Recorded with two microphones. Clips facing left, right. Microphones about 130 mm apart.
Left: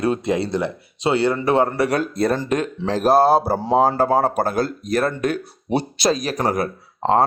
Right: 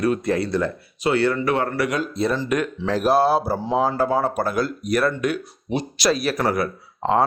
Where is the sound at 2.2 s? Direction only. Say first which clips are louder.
Even; 50° left (ahead or behind).